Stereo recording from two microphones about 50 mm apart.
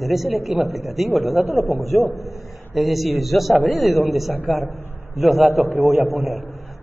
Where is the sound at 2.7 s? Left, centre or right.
Centre.